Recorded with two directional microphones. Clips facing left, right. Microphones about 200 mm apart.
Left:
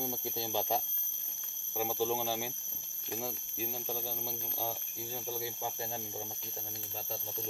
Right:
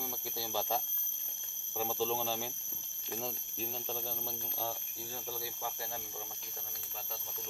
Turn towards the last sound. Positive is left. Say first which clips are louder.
# left 3 dB
turn(degrees=20)  # may be behind; listen again after turning